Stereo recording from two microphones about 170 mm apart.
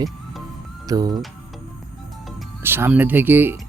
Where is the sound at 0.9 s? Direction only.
20° right (ahead or behind).